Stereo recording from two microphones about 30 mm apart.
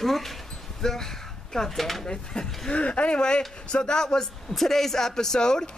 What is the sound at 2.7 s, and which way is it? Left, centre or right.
Speech, left.